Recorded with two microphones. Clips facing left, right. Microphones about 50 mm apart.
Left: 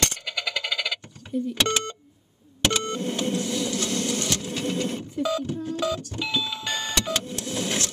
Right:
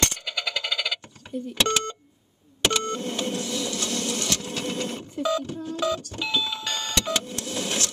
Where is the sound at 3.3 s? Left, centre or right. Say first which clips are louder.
Left 2 dB; left.